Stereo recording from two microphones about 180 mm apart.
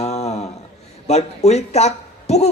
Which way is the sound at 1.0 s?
35° left (ahead or behind).